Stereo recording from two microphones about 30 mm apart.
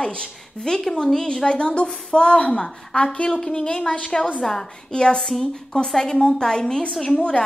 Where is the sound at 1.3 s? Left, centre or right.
Left.